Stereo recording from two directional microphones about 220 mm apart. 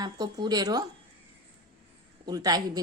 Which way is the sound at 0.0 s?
20° right (ahead or behind).